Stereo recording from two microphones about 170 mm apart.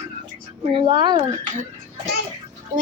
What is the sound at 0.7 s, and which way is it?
Speech, 25° right (ahead or behind).